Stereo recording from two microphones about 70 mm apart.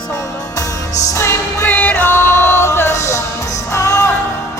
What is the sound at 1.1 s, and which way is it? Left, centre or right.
Music, left.